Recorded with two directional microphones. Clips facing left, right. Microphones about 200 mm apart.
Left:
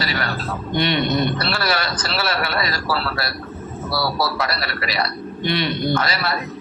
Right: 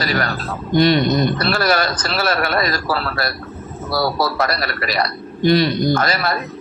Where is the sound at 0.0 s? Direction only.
45° right (ahead or behind).